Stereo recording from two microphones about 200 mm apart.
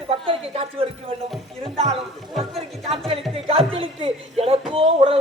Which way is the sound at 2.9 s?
30° right (ahead or behind).